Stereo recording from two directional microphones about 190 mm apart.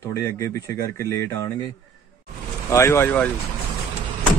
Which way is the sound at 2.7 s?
15° left (ahead or behind).